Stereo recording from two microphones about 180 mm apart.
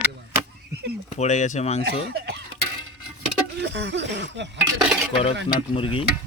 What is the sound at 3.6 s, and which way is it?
Speech, 75° right (ahead or behind).